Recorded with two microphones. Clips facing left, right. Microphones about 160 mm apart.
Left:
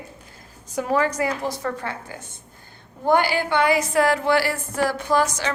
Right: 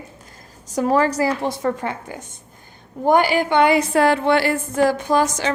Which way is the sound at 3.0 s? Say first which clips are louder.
Right 3 dB; 15° right (ahead or behind).